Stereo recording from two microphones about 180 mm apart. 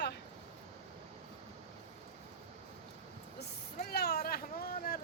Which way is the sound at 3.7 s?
60° left (ahead or behind).